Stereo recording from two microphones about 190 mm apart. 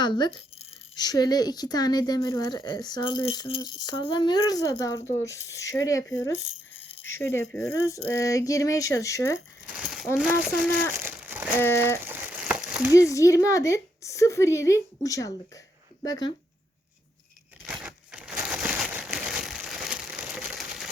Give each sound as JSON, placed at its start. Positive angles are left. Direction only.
{"t": 0.0, "sound": "speech", "side_deg": 25}
{"t": 9.6, "sound": "speech", "side_deg": -5}
{"t": 10.9, "sound": "crumpling", "side_deg": -10}
{"t": 11.6, "sound": "speech", "side_deg": 15}
{"t": 11.9, "sound": "a sound", "side_deg": -10}
{"t": 12.9, "sound": "speech", "side_deg": 15}
{"t": 17.6, "sound": "crumpling", "side_deg": -5}